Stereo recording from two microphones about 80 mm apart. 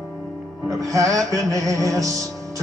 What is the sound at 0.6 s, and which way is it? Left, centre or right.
Music, right.